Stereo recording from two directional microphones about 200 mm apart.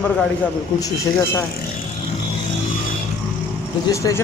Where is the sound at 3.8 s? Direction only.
15° left (ahead or behind).